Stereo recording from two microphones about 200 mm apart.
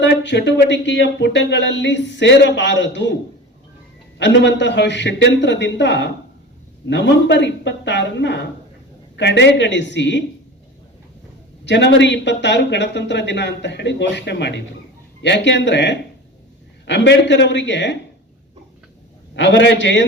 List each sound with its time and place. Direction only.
0.0 s speech: 60° left (ahead or behind)
4.2 s speech: 65° left (ahead or behind)
11.6 s speech: 60° left (ahead or behind)
19.4 s speech: 65° left (ahead or behind)